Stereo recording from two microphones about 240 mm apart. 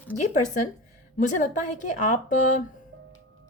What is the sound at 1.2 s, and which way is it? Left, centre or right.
A woman's voice, left.